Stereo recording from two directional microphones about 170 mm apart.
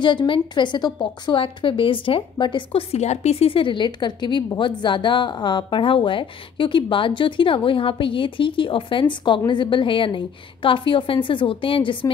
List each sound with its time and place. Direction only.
0.0 s a woman's voice: 30° left (ahead or behind)